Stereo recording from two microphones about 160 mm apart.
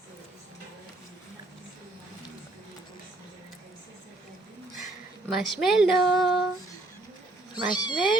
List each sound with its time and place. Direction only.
5.3 s speech: 5° right (ahead or behind)
7.5 s speech: 25° left (ahead or behind)